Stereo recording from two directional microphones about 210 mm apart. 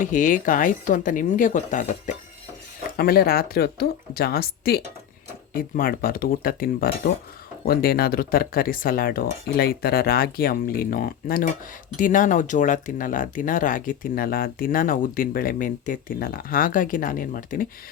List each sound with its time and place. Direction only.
0.0 s speech: 40° left (ahead or behind)